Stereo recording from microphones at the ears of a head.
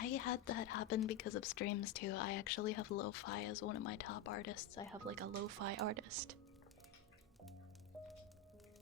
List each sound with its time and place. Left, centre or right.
0.0 s speech: left
5.0 s speech: right